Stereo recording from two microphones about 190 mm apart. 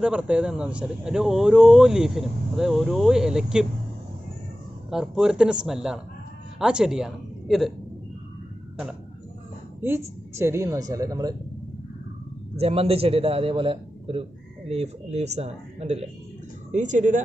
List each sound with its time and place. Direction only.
0.0 s speech: 5° right (ahead or behind)
4.9 s speech: 5° right (ahead or behind)
9.8 s a woman's voice: 15° right (ahead or behind)
12.5 s a man's voice: 30° right (ahead or behind)